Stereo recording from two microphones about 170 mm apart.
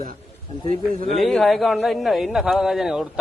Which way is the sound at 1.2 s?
Centre (ahead or behind).